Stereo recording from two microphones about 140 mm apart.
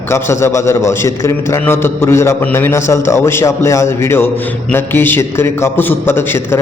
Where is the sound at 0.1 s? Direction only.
20° left (ahead or behind).